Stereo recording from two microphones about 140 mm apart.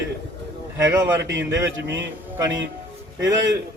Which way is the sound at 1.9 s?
15° right (ahead or behind).